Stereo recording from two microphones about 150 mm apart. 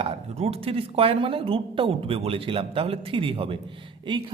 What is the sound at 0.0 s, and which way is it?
A man's voice, 45° right (ahead or behind).